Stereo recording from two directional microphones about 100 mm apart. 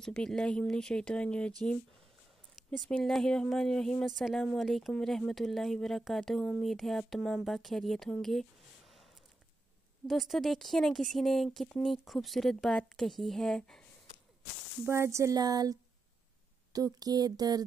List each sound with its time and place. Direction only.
0.0 s speech: 5° left (ahead or behind)
2.9 s speech: 5° left (ahead or behind)
10.0 s speech: centre (ahead or behind)
14.9 s a sound: 25° right (ahead or behind)